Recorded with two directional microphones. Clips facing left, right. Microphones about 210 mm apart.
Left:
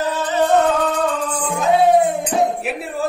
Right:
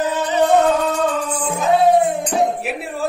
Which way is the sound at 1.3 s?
5° right (ahead or behind).